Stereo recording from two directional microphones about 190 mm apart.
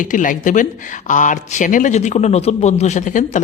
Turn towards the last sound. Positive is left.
turn(degrees=40)  # may be behind; listen again after turning